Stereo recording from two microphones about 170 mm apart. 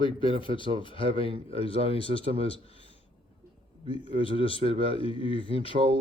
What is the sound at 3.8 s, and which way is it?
A man's voice, 35° left (ahead or behind).